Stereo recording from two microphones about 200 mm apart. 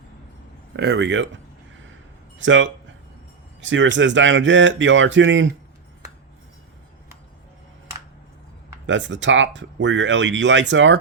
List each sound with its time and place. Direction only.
0.8 s speech: 60° right (ahead or behind)
2.4 s speech: 70° right (ahead or behind)
8.9 s speech: 65° right (ahead or behind)